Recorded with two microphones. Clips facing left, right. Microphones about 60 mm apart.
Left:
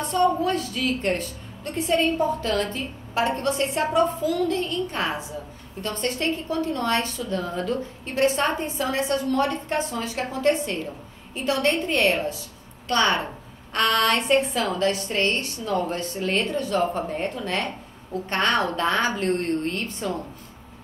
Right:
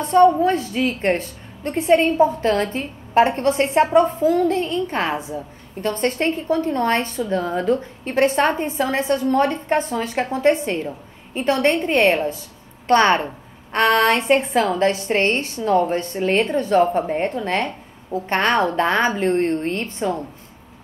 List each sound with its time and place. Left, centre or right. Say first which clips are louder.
0.1 s a woman's voice: right 8 dB; right